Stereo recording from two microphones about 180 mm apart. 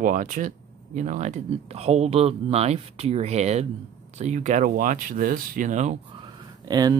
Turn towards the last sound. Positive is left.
turn(degrees=-20)  # may be behind; listen again after turning